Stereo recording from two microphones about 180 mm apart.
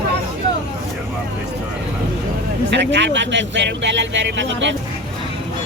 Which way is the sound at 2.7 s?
80° right.